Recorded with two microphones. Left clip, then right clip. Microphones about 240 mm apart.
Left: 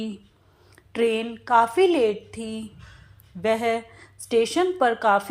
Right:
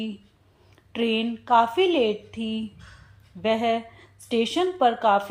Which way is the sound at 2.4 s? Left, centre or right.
Left.